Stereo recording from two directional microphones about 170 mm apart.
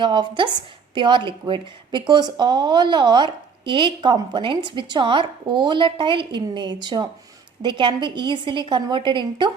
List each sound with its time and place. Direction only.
0.0 s speech: 30° right (ahead or behind)